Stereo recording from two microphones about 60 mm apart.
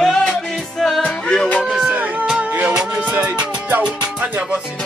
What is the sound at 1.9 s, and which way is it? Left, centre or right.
Music, right.